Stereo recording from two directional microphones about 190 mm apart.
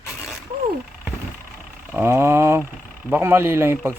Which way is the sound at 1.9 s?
10° right (ahead or behind).